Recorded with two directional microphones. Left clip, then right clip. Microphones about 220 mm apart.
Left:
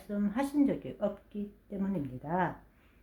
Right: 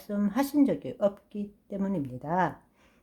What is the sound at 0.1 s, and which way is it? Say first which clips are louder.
A woman's voice: right 4 dB; 40° right (ahead or behind).